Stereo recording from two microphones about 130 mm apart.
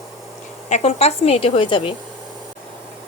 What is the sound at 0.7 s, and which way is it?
Speech, 55° left (ahead or behind).